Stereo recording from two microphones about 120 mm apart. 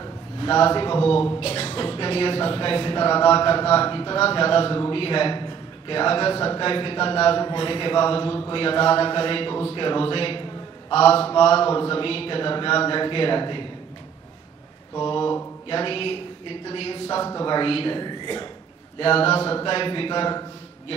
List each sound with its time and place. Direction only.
0.0 s a sound: 45° left (ahead or behind)
1.4 s a man's voice: 55° left (ahead or behind)
15.0 s speech: 45° left (ahead or behind)
17.2 s a man's voice: 30° left (ahead or behind)
18.9 s speech: 50° left (ahead or behind)